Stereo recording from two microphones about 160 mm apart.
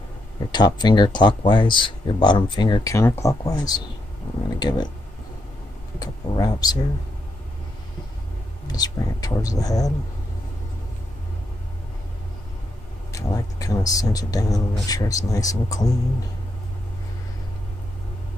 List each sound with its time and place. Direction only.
0.5 s speech: 25° left (ahead or behind)
5.9 s speech: 25° left (ahead or behind)
8.7 s speech: 25° left (ahead or behind)
13.1 s speech: 20° left (ahead or behind)